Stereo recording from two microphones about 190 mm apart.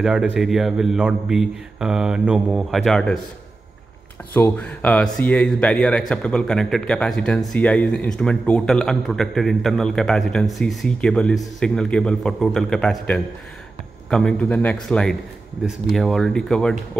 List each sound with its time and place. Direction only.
0.0 s speech: centre (ahead or behind)
4.3 s speech: 10° left (ahead or behind)